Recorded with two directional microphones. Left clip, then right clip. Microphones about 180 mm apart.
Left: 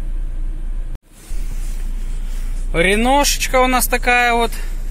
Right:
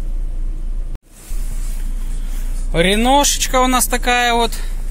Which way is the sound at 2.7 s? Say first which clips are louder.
Right 1 dB; 5° right (ahead or behind).